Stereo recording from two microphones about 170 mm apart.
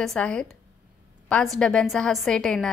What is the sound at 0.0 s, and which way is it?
A woman's voice, 5° left (ahead or behind).